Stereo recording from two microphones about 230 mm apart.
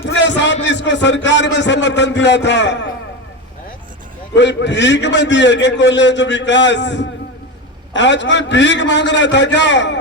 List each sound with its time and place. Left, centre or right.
0.1 s a man's voice: left
4.4 s a man's voice: left